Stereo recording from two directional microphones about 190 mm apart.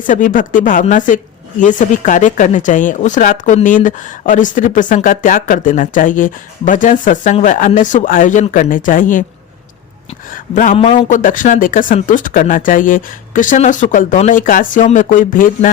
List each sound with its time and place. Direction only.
0.0 s speech: 45° left (ahead or behind)
10.2 s a sound: 45° left (ahead or behind)
10.8 s speech: 35° left (ahead or behind)